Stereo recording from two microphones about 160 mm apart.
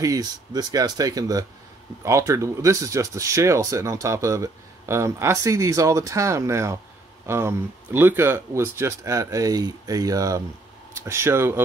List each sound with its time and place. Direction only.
0.0 s speech: 25° right (ahead or behind)